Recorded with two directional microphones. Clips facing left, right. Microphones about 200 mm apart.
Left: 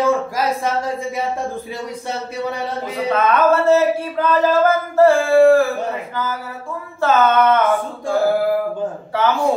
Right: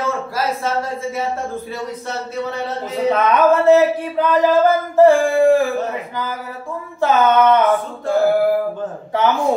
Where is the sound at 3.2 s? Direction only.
15° right (ahead or behind).